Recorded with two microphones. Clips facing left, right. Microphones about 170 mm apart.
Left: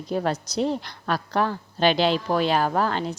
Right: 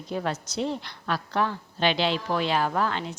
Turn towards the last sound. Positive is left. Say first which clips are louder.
# left 3 dB
turn(degrees=40)  # may be behind; listen again after turning